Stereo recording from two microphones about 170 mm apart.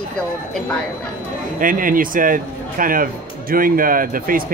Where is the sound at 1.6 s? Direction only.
55° right (ahead or behind).